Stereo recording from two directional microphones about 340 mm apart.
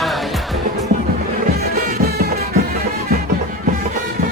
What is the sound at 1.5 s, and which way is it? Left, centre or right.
Music, right.